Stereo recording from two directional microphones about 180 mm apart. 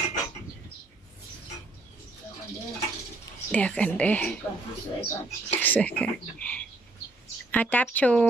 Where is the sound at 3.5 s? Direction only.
5° left (ahead or behind).